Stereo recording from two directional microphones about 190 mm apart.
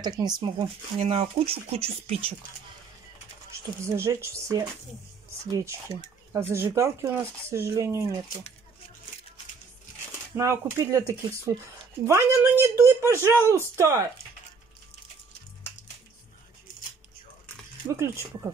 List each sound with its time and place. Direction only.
0.0 s speech: 20° right (ahead or behind)
3.8 s speech: 15° right (ahead or behind)
6.3 s speech: 15° right (ahead or behind)
10.3 s speech: 15° right (ahead or behind)
17.9 s speech: 15° right (ahead or behind)